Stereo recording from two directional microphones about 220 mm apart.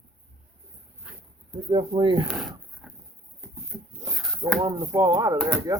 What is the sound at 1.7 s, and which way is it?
Speech, 20° right (ahead or behind).